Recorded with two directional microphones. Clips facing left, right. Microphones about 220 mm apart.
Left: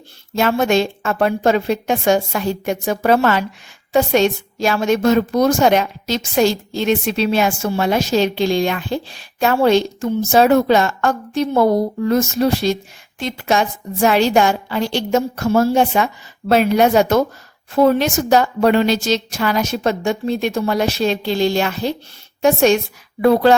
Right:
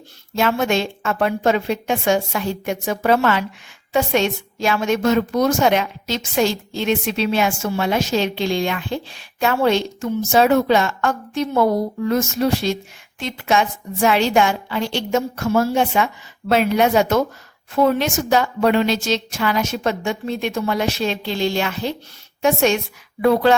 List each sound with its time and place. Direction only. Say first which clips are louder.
0.3 s a woman's voice: left 3 dB; 40° left (ahead or behind)